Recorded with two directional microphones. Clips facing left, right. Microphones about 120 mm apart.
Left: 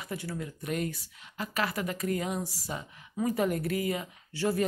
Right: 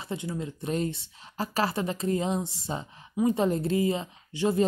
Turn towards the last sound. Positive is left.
turn(degrees=-20)  # may be behind; listen again after turning